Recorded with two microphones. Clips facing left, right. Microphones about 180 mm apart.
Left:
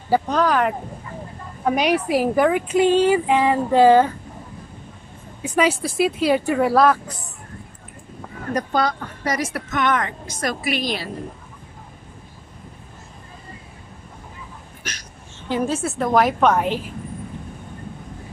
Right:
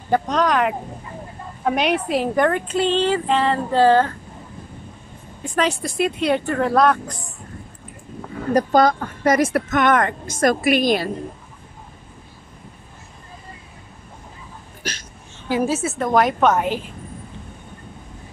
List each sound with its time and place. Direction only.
0.1 s speech: 5° left (ahead or behind)
5.6 s speech: 5° left (ahead or behind)
8.5 s a woman's voice: 45° right (ahead or behind)
14.8 s hiccup: 30° right (ahead or behind)
15.4 s speech: 10° right (ahead or behind)